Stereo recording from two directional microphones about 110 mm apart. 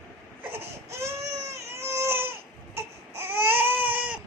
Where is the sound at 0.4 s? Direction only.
20° right (ahead or behind).